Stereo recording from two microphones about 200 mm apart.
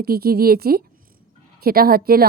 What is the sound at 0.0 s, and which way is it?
A woman's voice, 50° right (ahead or behind).